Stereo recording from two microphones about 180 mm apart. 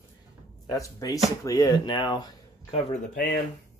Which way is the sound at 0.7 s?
20° left (ahead or behind).